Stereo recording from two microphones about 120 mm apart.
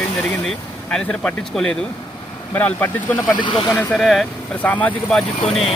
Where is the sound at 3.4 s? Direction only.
40° left (ahead or behind).